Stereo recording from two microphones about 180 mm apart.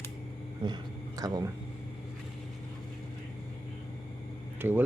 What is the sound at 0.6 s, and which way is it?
Speech, 25° right (ahead or behind).